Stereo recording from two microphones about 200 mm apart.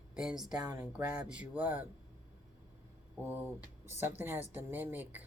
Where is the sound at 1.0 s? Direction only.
5° right (ahead or behind).